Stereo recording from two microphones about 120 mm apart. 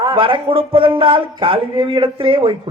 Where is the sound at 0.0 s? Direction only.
45° right (ahead or behind).